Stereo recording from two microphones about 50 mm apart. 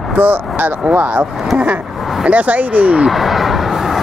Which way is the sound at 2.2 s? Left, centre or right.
Right.